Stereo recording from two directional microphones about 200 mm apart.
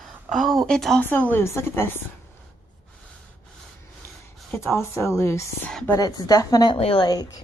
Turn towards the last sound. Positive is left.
turn(degrees=20)  # may be behind; listen again after turning